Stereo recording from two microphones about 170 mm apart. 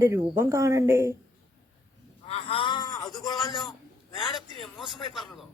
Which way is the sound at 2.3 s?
35° left (ahead or behind).